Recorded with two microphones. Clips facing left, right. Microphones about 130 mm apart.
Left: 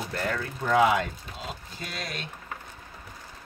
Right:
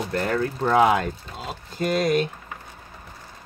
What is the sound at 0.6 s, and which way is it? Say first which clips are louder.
Speech: right 3 dB; 50° right (ahead or behind).